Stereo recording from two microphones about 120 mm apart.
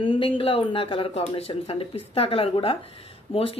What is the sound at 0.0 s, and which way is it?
Speech, 45° left (ahead or behind).